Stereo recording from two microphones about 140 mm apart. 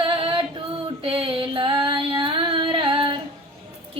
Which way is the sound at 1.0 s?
40° right (ahead or behind).